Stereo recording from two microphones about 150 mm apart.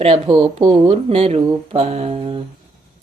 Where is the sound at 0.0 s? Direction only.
40° right (ahead or behind).